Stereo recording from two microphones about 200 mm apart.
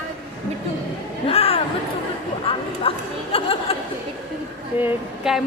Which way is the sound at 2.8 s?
30° left (ahead or behind).